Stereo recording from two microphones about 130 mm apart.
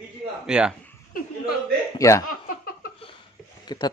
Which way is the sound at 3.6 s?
35° left (ahead or behind).